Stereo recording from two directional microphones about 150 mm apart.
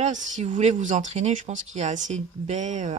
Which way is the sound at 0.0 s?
50° right (ahead or behind).